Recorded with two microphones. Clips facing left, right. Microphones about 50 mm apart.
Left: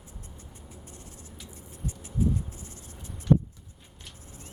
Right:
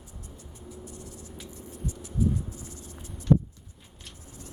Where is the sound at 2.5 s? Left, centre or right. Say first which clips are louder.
Right 3 dB; left.